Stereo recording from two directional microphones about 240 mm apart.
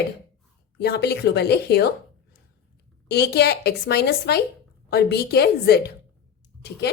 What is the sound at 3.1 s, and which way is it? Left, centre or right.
A woman's voice, left.